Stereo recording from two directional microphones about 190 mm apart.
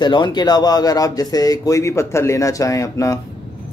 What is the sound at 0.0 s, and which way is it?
A man's voice, 25° left (ahead or behind).